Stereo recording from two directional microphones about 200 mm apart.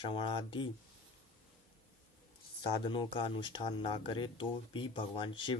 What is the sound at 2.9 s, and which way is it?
Speech, 25° left (ahead or behind).